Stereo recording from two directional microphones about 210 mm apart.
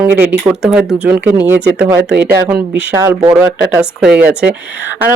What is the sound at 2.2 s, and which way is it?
Speech, 10° right (ahead or behind).